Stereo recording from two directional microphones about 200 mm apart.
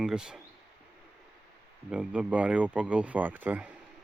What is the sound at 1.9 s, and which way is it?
Speech, 5° right (ahead or behind).